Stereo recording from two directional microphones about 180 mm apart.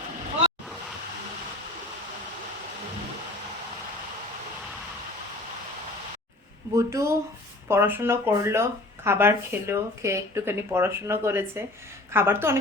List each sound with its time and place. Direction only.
6.7 s speech: 15° right (ahead or behind)